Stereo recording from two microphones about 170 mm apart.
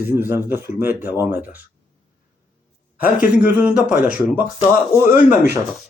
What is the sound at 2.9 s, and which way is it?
Speech, 60° left (ahead or behind).